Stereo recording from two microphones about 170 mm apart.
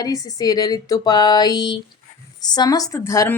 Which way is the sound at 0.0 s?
20° left (ahead or behind).